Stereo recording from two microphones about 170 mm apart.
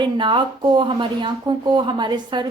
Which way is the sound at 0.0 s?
30° right (ahead or behind).